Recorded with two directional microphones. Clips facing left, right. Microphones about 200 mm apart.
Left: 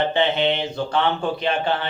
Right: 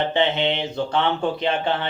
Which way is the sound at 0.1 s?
20° right (ahead or behind).